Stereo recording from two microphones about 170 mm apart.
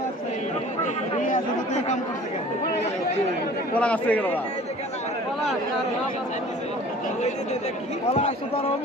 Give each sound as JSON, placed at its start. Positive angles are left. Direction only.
{"t": 1.2, "sound": "speech", "side_deg": 45}
{"t": 3.8, "sound": "a man's voice", "side_deg": 10}
{"t": 8.1, "sound": "speech", "side_deg": 40}